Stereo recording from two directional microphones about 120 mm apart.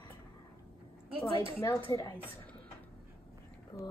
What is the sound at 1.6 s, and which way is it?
Speech, 25° left (ahead or behind).